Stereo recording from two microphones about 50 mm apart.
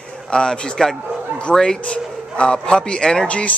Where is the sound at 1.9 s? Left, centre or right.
Left.